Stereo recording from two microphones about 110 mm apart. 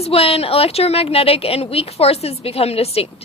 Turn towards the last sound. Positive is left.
turn(degrees=65)  # may be behind; listen again after turning